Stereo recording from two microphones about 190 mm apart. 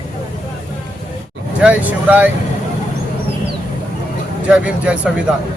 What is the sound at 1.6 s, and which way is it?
Speech, 10° right (ahead or behind).